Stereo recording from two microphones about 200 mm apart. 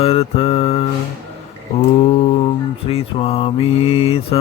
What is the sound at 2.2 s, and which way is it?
Mantra, 30° left (ahead or behind).